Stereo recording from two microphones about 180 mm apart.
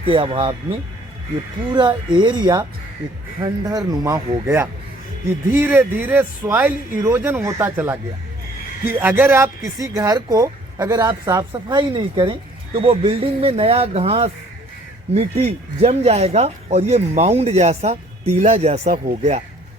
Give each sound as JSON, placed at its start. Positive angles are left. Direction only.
{"t": 0.0, "sound": "speech", "side_deg": -30}